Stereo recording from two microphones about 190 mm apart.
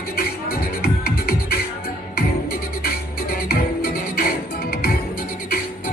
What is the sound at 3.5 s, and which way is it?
Music, 50° left (ahead or behind).